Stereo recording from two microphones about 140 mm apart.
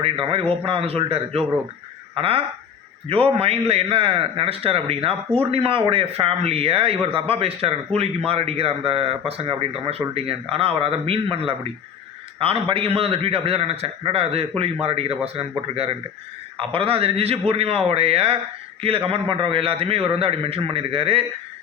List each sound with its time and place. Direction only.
0.0 s a man's voice: 40° right (ahead or behind)